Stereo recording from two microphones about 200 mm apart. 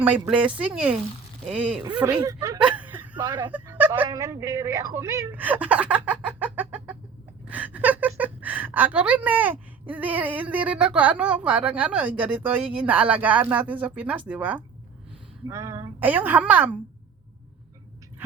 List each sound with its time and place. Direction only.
0.0 s a woman's voice: 5° right (ahead or behind)
2.6 s a sound: 5° right (ahead or behind)
3.5 s a woman's voice: 10° right (ahead or behind)